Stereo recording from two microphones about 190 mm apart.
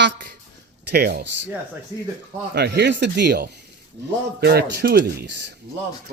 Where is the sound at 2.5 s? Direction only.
60° right (ahead or behind).